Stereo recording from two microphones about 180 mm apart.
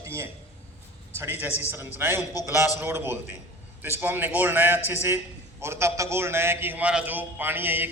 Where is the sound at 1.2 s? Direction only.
10° right (ahead or behind).